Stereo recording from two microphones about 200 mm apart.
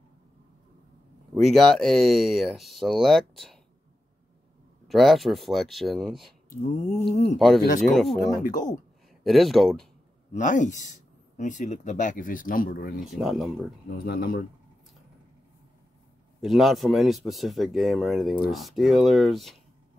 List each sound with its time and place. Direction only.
1.3 s speech: centre (ahead or behind)
4.8 s speech: centre (ahead or behind)
6.5 s speech: 45° left (ahead or behind)
7.3 s speech: centre (ahead or behind)
10.3 s speech: 40° left (ahead or behind)
13.0 s speech: centre (ahead or behind)
13.9 s speech: 50° left (ahead or behind)
16.3 s speech: centre (ahead or behind)